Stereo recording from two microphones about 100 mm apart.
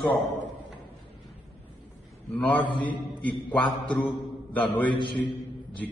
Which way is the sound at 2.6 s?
50° left (ahead or behind).